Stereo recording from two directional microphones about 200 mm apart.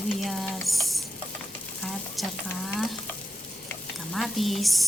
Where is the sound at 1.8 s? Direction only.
Centre (ahead or behind).